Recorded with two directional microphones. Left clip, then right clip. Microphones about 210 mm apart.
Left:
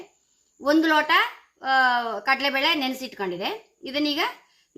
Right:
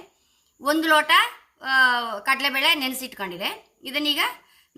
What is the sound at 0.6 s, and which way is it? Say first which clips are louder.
A woman's voice: right 1 dB; 40° right (ahead or behind).